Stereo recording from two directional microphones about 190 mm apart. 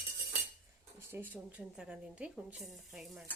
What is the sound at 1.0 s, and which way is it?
Speech, 10° right (ahead or behind).